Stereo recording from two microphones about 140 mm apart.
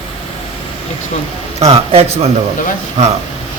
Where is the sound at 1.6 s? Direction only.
45° right (ahead or behind).